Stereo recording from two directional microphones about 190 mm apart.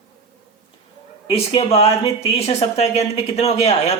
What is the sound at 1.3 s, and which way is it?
Speech, 30° left (ahead or behind).